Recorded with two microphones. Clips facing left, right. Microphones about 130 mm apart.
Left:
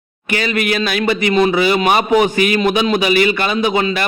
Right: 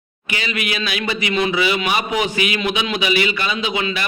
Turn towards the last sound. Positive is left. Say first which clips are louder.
# left 6 dB
turn(degrees=45)  # may be behind; listen again after turning